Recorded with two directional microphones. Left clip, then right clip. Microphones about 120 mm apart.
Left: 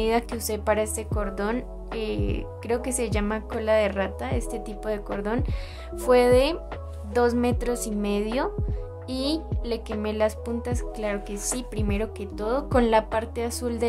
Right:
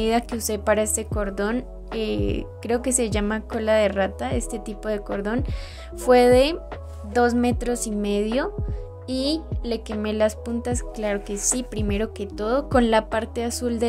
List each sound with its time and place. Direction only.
0.0 s speech: 25° right (ahead or behind)